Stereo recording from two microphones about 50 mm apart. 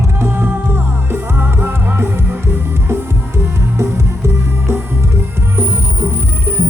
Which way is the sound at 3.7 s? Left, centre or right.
Right.